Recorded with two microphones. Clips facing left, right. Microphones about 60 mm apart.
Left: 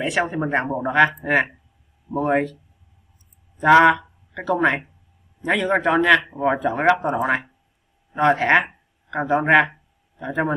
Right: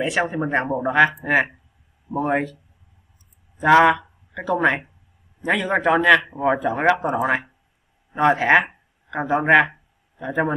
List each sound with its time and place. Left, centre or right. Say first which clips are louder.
0.0 s a man's voice: even; centre